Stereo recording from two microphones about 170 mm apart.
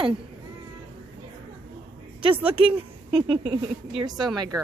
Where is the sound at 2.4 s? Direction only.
30° right (ahead or behind).